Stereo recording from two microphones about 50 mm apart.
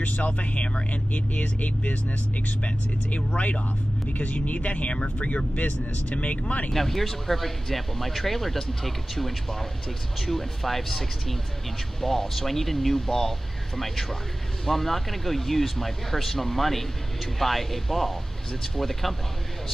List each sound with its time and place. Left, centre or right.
0.0 s speech: left
6.7 s speech: centre